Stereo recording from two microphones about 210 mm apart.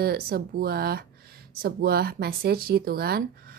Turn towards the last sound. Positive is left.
turn(degrees=-50)  # may be behind; listen again after turning